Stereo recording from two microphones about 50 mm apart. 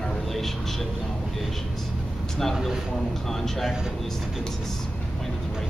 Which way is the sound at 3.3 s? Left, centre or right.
Centre.